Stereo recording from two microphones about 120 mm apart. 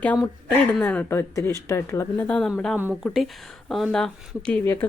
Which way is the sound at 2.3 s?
5° left (ahead or behind).